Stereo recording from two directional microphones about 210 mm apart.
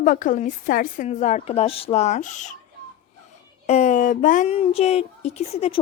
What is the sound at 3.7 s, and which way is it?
Speech, 30° left (ahead or behind).